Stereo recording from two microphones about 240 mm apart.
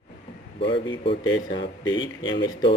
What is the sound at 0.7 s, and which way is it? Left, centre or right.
Speech, left.